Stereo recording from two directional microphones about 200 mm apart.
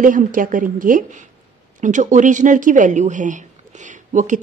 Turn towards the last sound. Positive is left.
turn(degrees=-40)  # may be behind; listen again after turning